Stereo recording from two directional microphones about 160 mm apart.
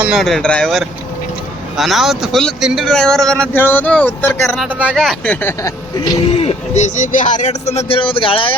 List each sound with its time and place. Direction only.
0.0 s speech: centre (ahead or behind); by 4.5 s 15° left (ahead or behind)
4.5 s speech: 5° right (ahead or behind); by 5.7 s 15° left (ahead or behind)
6.3 s speech: 40° left (ahead or behind)